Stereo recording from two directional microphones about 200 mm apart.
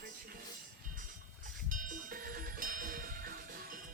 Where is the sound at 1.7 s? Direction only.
40° right (ahead or behind).